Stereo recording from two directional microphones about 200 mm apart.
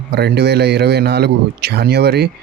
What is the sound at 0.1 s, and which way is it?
Speech, 55° right (ahead or behind).